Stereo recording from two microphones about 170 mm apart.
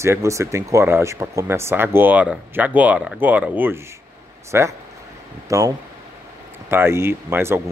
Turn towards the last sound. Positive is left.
turn(degrees=-15)  # may be behind; listen again after turning